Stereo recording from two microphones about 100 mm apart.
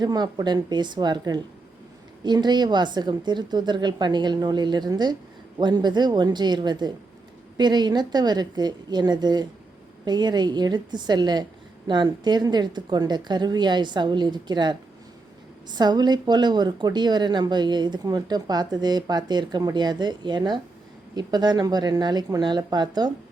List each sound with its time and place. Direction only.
0.0 s a woman's voice: 45° right (ahead or behind)